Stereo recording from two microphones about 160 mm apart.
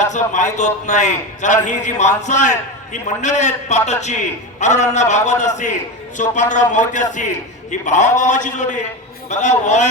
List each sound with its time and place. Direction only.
0.0 s a man's voice: 50° left (ahead or behind)